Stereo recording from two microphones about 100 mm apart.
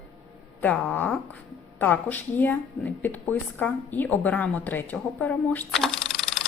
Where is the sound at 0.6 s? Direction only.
15° left (ahead or behind).